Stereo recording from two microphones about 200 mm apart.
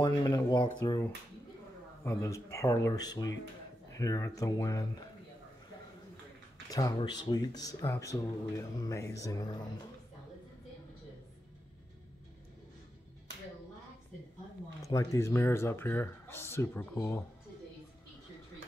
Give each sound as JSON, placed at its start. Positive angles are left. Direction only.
{"t": 0.0, "sound": "speech", "side_deg": 20}
{"t": 6.7, "sound": "speech", "side_deg": 20}
{"t": 14.8, "sound": "speech", "side_deg": 15}